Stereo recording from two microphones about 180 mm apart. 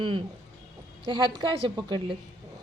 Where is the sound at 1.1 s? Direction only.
25° right (ahead or behind).